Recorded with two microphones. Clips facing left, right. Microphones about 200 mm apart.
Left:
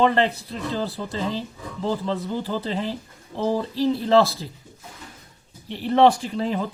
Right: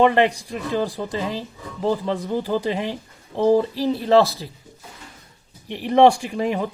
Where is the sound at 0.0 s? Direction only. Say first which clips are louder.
Right 3 dB; 15° right (ahead or behind).